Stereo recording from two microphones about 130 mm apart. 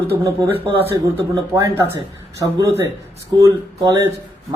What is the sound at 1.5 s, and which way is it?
Speech, 25° right (ahead or behind).